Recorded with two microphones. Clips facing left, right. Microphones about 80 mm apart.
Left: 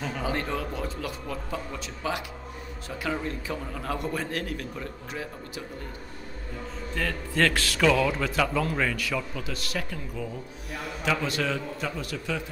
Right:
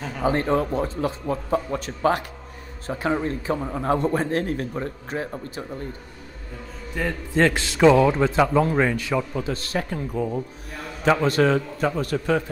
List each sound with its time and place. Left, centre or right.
0.2 s a man's voice: right
2.9 s a man's voice: right
7.0 s a man's voice: right